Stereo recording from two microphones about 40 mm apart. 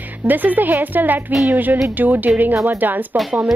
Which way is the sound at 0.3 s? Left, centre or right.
Right.